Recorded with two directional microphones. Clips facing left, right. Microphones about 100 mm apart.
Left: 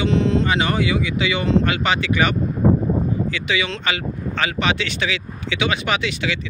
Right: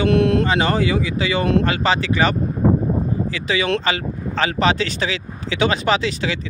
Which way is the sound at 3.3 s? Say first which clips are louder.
Right 3 dB; 35° right (ahead or behind).